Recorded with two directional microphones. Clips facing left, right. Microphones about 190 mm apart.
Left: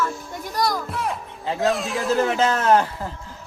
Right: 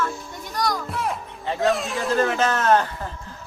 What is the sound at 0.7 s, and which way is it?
A man's voice, centre (ahead or behind).